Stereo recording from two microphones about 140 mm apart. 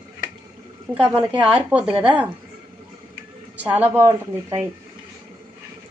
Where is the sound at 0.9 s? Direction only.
10° right (ahead or behind).